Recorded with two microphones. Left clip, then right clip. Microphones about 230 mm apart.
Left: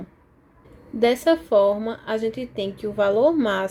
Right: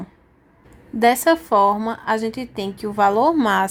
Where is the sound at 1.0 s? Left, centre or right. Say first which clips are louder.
Right 3 dB; centre.